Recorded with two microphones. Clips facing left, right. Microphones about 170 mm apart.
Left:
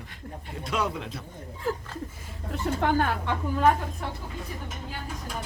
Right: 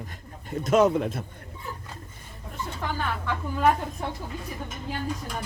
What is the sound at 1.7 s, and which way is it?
Speech, 90° left.